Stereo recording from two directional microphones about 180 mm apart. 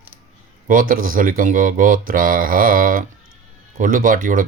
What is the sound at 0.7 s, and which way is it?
Speech, 50° right (ahead or behind).